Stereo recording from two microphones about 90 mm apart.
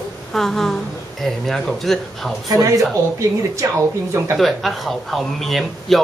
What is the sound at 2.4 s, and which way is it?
Speech, 40° right (ahead or behind).